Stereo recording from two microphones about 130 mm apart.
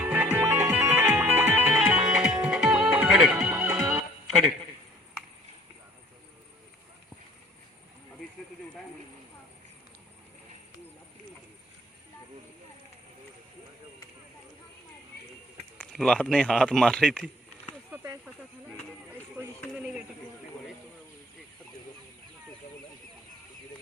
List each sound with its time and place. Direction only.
0.0 s music: 15° right (ahead or behind)
15.8 s a man's voice: 5° left (ahead or behind)
17.9 s snake: 20° right (ahead or behind)
19.6 s snake: 5° right (ahead or behind)